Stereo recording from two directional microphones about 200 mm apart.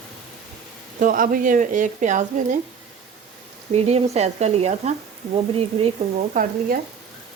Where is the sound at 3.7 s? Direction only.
30° right (ahead or behind).